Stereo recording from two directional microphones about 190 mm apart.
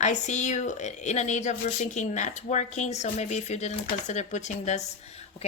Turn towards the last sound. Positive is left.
turn(degrees=40)  # may be behind; listen again after turning